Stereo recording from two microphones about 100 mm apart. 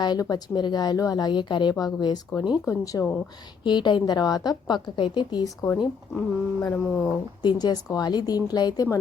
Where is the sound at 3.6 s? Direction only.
50° left (ahead or behind).